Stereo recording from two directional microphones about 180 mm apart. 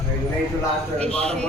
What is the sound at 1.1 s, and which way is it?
Speech, 5° left (ahead or behind).